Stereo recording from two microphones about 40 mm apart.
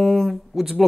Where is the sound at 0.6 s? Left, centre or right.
Centre.